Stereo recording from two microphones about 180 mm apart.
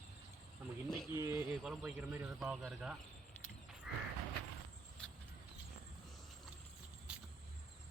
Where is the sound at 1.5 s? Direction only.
Centre (ahead or behind).